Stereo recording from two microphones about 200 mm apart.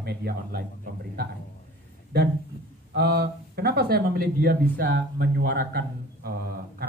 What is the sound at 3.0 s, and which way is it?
Speech, 55° right (ahead or behind).